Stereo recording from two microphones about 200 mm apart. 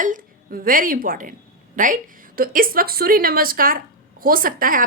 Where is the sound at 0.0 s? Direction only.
45° right (ahead or behind).